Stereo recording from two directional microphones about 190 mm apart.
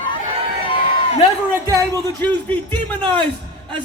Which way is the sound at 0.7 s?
30° left (ahead or behind).